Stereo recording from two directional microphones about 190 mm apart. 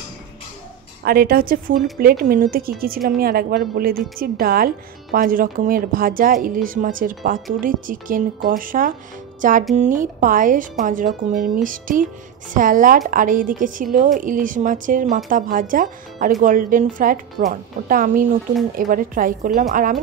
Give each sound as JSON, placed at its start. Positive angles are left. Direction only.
{"t": 1.0, "sound": "a woman's voice", "side_deg": -50}